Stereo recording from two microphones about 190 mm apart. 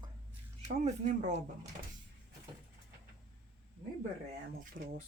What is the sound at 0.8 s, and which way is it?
Speech, 35° right (ahead or behind).